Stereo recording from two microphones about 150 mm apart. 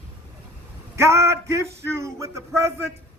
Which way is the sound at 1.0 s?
20° right (ahead or behind).